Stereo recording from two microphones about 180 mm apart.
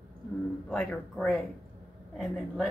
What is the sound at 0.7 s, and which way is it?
Speech, 5° left (ahead or behind).